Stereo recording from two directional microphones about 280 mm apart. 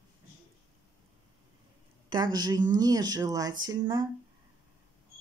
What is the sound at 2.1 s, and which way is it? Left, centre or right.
Speech, centre.